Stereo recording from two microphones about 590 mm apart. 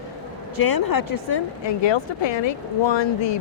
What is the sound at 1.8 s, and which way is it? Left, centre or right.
Speech, left.